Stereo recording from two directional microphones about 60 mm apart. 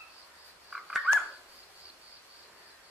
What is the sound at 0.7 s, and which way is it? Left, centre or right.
Bird, centre.